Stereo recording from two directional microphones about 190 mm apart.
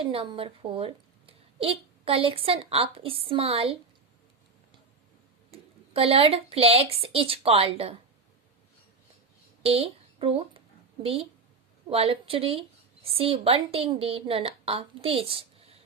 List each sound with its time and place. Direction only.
0.0 s a woman's voice: 30° right (ahead or behind)
5.5 s speech: 30° right (ahead or behind)
9.6 s a woman's voice: 30° right (ahead or behind)